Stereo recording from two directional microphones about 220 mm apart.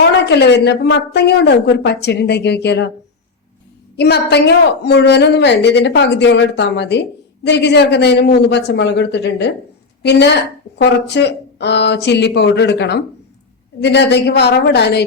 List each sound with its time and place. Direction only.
0.0 s a woman's voice: 50° left (ahead or behind)
3.9 s a woman's voice: 50° left (ahead or behind)